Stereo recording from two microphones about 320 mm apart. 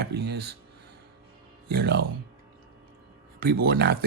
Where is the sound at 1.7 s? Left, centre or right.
Right.